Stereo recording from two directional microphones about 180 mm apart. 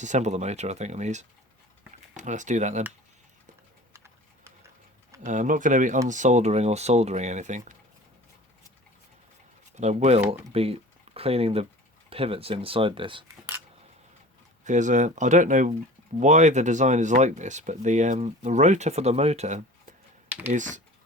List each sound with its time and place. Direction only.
0.0 s speech: 40° right (ahead or behind)
3.9 s pigeon: 15° right (ahead or behind)
5.2 s speech: 45° right (ahead or behind)
9.7 s speech: 40° right (ahead or behind)
13.2 s speech: 10° right (ahead or behind)
14.6 s speech: 40° right (ahead or behind)